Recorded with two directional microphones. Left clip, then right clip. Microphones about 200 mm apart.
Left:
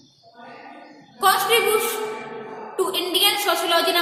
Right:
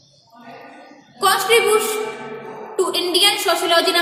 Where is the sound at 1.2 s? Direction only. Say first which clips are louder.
Right 3 dB; 25° right (ahead or behind).